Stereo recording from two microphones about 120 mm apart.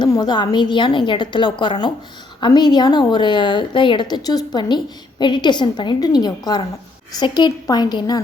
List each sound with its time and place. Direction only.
0.0 s a woman's voice: 35° left (ahead or behind)